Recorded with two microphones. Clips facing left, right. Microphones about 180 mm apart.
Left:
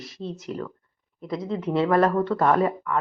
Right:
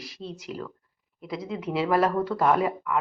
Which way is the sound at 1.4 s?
40° left (ahead or behind).